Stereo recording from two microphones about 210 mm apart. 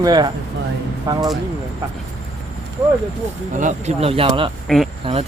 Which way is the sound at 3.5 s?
35° right (ahead or behind).